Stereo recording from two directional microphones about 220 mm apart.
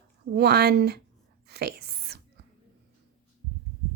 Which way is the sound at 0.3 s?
45° right (ahead or behind).